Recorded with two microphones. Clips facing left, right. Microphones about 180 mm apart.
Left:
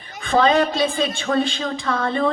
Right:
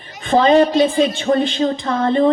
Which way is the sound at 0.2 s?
20° right (ahead or behind).